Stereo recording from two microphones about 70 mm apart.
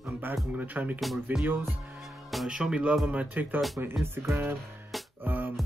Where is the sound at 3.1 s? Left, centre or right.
Right.